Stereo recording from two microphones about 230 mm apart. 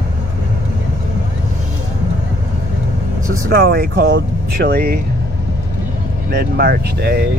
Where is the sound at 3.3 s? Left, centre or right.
Right.